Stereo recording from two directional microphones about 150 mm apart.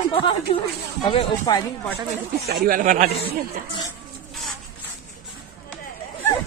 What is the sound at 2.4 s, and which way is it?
Speech, 70° right (ahead or behind).